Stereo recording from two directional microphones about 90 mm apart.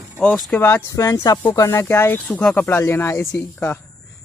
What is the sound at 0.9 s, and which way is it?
Speech, 40° left (ahead or behind).